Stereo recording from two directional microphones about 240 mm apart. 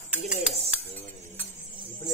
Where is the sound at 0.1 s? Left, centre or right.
Centre.